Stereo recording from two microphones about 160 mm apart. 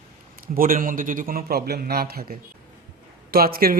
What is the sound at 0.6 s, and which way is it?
Speech, 60° right (ahead or behind).